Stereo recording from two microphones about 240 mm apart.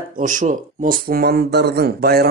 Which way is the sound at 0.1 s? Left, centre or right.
Right.